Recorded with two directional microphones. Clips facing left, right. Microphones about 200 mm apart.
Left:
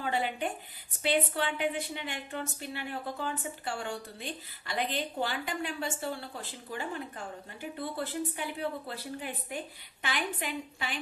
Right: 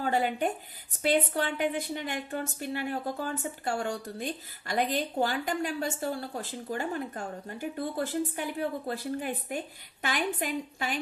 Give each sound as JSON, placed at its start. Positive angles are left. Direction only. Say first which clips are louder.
{"t": 0.0, "sound": "a woman's voice", "louder": "right 4 dB", "side_deg": -45}